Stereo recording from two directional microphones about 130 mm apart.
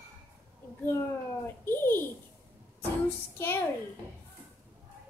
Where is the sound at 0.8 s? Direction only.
15° left (ahead or behind).